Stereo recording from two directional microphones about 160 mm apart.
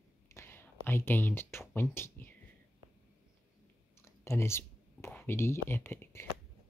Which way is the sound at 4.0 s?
15° left (ahead or behind).